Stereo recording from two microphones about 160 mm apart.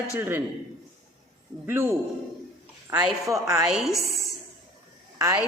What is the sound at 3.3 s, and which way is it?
Speech, 20° right (ahead or behind).